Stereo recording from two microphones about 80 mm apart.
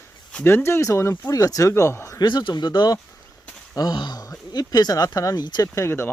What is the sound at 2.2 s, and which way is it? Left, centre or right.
Speech, left.